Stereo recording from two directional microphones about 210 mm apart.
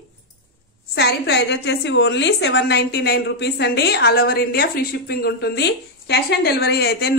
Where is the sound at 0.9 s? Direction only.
50° left (ahead or behind).